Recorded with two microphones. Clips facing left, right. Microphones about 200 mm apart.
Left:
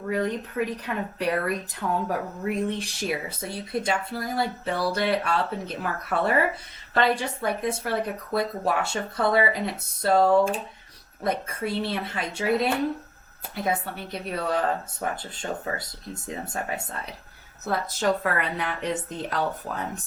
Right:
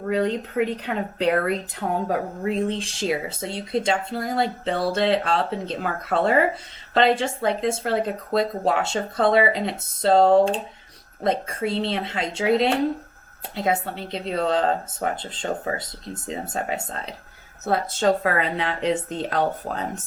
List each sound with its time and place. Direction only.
0.1 s speech: 25° right (ahead or behind)
19.7 s speech: 45° right (ahead or behind)